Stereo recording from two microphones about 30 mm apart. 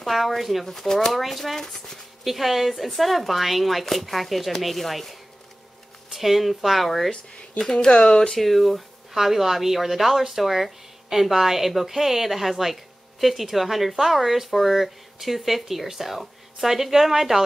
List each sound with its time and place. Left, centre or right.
0.0 s speech: centre
0.7 s speech: centre
7.7 s speech: left
8.4 s speech: centre
9.1 s speech: centre